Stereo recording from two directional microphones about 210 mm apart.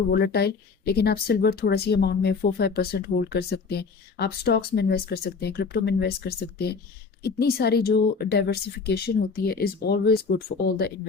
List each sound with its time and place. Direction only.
0.1 s speech: 50° left (ahead or behind)